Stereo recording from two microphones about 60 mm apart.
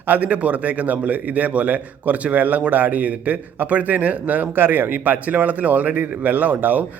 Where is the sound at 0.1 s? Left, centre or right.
Right.